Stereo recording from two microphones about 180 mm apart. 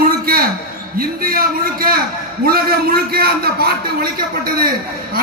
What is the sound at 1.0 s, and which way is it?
A man's voice, 55° right (ahead or behind).